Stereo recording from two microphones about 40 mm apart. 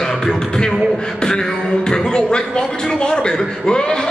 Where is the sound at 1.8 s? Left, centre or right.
Centre.